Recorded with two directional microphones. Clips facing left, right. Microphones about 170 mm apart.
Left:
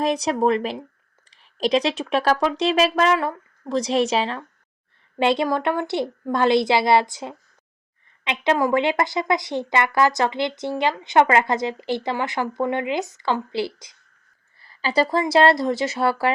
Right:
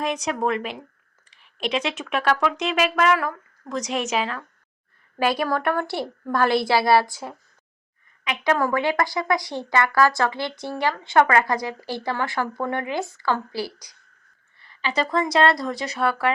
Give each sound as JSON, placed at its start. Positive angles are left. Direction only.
{"t": 0.0, "sound": "a woman's voice", "side_deg": 35}
{"t": 14.6, "sound": "speech", "side_deg": 35}